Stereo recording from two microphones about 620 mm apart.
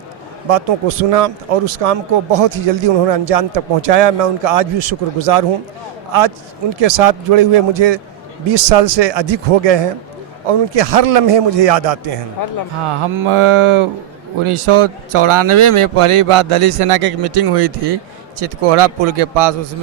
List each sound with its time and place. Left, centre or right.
0.4 s speech: right
12.8 s mantra: right
14.4 s speech: right